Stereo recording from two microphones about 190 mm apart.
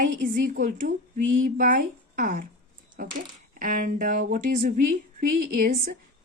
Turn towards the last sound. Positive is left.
turn(degrees=-50)  # may be behind; listen again after turning